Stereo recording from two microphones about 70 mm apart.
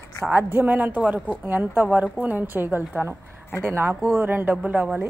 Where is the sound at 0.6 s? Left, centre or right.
Right.